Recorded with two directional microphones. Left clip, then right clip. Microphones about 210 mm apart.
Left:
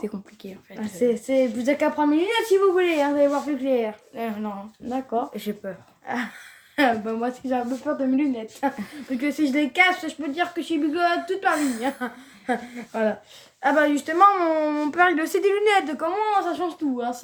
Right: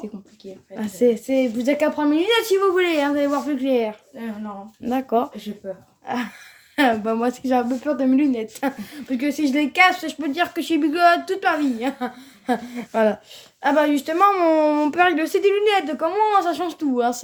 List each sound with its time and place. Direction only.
0.9 s a woman's voice: 15° right (ahead or behind)
2.0 s speech: 35° right (ahead or behind)
3.5 s speech: 20° right (ahead or behind)
4.2 s speech: 55° left (ahead or behind)
4.9 s speech: 50° right (ahead or behind)
6.1 s a woman's voice: 15° right (ahead or behind)
7.0 s speech: 40° right (ahead or behind)
9.0 s speech: 20° right (ahead or behind); by 11.5 s 35° right (ahead or behind)
11.8 s speech: 15° right (ahead or behind)
12.7 s speech: 35° right (ahead or behind)
13.6 s a woman's voice: 10° right (ahead or behind)
15.2 s a woman's voice: centre (ahead or behind)
16.2 s speech: 40° right (ahead or behind)